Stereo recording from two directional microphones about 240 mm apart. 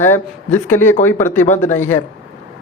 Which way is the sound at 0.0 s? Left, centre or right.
Centre.